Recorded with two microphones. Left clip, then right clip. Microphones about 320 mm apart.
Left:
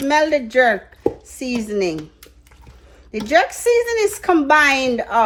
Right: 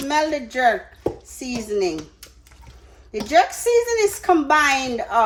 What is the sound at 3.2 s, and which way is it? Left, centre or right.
Speech, left.